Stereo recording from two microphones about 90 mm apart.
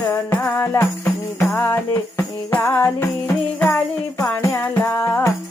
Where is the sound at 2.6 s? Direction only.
30° left (ahead or behind).